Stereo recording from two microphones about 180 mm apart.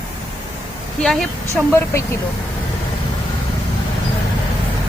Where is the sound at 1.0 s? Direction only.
Centre (ahead or behind).